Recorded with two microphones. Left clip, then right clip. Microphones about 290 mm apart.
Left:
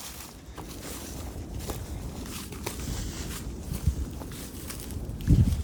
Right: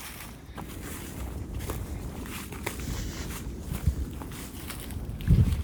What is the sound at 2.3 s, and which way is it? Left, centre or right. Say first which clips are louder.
Walk: right 2 dB; centre.